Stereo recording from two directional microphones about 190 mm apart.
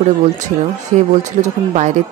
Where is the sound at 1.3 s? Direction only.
35° right (ahead or behind).